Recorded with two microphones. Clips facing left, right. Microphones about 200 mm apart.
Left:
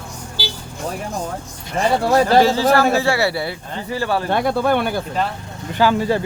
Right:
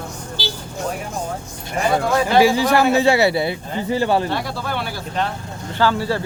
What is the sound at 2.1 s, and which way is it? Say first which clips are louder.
Speech: left 4 dB; 35° left (ahead or behind).